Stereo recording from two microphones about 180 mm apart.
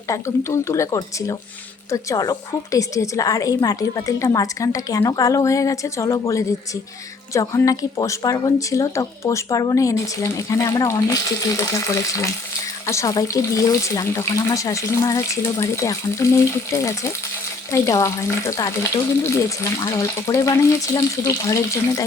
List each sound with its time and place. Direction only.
0.1 s a woman's voice: 15° left (ahead or behind)